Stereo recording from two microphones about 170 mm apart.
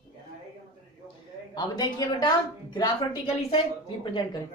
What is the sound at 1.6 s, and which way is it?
A woman's voice, 25° left (ahead or behind).